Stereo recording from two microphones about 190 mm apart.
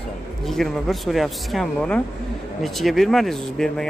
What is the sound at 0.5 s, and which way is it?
Speech, centre (ahead or behind).